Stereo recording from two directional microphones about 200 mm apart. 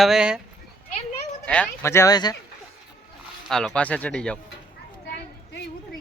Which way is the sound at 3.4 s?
Centre (ahead or behind).